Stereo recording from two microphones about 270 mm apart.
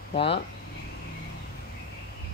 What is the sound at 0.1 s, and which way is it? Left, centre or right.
Speech, left.